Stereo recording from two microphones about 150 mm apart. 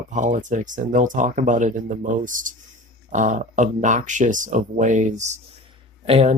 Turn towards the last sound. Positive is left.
turn(degrees=-45)  # may be behind; listen again after turning